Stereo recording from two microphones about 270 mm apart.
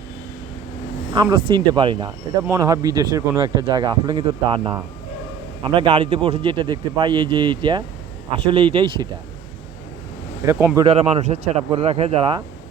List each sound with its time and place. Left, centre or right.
1.1 s speech: centre
10.4 s speech: centre
10.8 s speech: right